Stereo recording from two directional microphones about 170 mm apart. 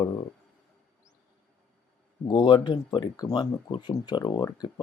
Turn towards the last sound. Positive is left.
turn(degrees=25)  # may be behind; listen again after turning